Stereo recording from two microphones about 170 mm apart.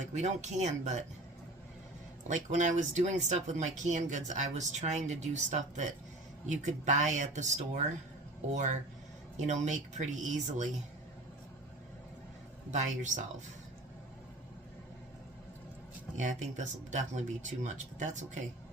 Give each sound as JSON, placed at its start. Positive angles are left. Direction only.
{"t": 0.0, "sound": "speech", "side_deg": -40}
{"t": 2.2, "sound": "speech", "side_deg": -45}
{"t": 12.7, "sound": "speech", "side_deg": -45}
{"t": 16.1, "sound": "speech", "side_deg": -45}